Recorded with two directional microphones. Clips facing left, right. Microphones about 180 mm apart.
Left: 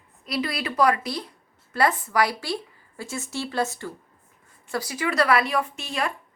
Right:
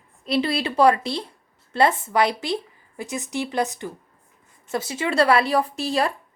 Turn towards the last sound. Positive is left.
turn(degrees=-35)  # may be behind; listen again after turning